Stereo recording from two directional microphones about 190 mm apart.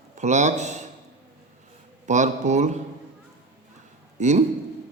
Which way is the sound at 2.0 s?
40° right (ahead or behind).